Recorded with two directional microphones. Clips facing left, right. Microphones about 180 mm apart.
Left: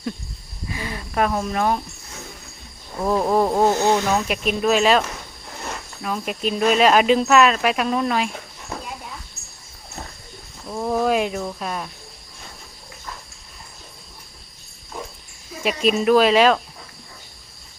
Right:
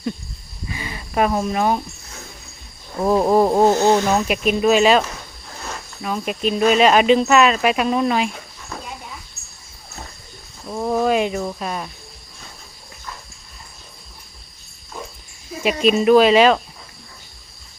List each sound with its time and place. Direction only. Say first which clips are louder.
0.7 s a sound: even; centre (ahead or behind)
3.4 s speech: right 3 dB; 15° right (ahead or behind)
4.3 s speech: right 3 dB; 5° right (ahead or behind)
10.7 s speech: right 2 dB; 5° right (ahead or behind)
15.6 s speech: right 3 dB; centre (ahead or behind)